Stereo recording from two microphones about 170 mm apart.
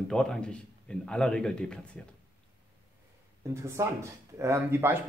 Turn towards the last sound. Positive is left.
turn(degrees=-15)  # may be behind; listen again after turning